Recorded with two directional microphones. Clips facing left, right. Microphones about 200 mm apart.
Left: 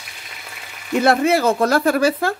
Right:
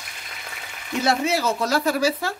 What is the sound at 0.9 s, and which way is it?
Speech, 55° left (ahead or behind).